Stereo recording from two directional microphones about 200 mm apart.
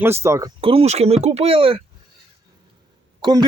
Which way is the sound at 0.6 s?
30° right (ahead or behind).